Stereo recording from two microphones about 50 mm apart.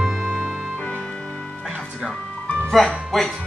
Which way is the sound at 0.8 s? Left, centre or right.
Left.